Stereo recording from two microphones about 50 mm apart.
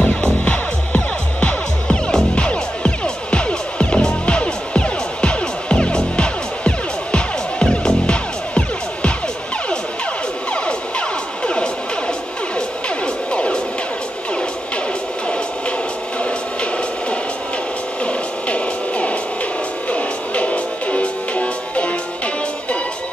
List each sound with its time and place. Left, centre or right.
0.0 s music: left
10.5 s music: left
16.2 s music: left